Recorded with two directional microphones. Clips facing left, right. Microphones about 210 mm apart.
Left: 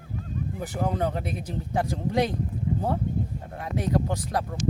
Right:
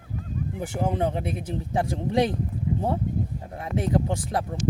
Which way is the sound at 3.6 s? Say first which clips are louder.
Right 1 dB; 25° right (ahead or behind).